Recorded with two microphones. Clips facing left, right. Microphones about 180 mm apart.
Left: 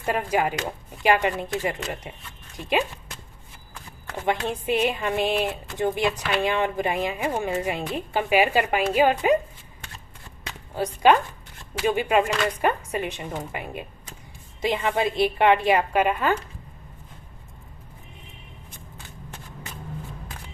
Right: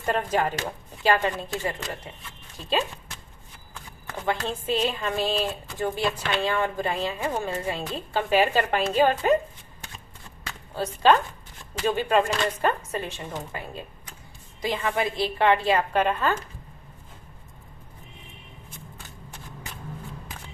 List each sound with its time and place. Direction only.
0.0 s a woman's voice: 10° left (ahead or behind)
4.4 s a woman's voice: 15° left (ahead or behind)
11.0 s a woman's voice: 15° left (ahead or behind)